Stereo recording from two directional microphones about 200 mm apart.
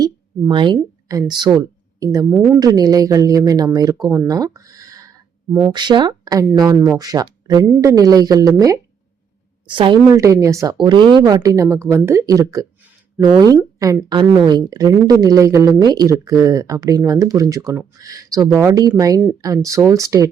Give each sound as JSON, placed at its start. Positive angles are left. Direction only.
{"t": 0.0, "sound": "speech", "side_deg": -25}
{"t": 5.7, "sound": "speech", "side_deg": -20}